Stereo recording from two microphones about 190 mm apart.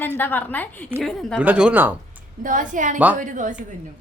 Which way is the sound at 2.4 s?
45° right (ahead or behind).